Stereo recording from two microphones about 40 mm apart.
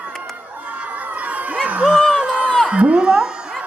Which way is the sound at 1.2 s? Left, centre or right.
Right.